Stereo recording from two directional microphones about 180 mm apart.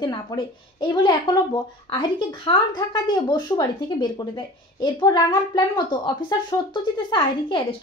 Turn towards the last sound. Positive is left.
turn(degrees=25)  # may be behind; listen again after turning